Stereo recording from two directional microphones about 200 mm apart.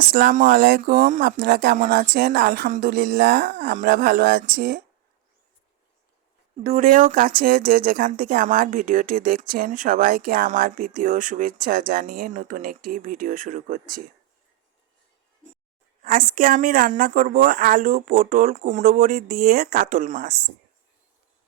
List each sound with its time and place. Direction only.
0.1 s speech: 45° right (ahead or behind)
6.6 s speech: 40° right (ahead or behind)
16.4 s speech: 45° right (ahead or behind)